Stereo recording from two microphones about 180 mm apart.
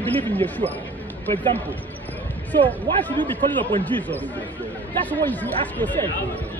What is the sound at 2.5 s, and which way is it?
Speech, 10° left (ahead or behind).